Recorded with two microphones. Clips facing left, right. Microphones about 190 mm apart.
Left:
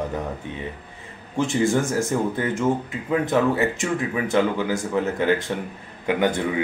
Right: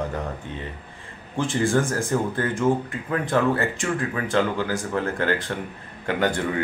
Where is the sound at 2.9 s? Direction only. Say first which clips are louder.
Left 3 dB; 20° left (ahead or behind).